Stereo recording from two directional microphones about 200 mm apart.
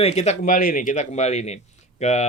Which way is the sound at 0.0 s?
35° left (ahead or behind).